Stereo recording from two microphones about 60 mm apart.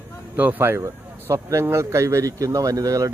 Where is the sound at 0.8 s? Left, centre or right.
Right.